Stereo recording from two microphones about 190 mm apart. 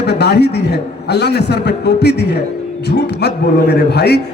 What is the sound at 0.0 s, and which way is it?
Speech, 60° left (ahead or behind).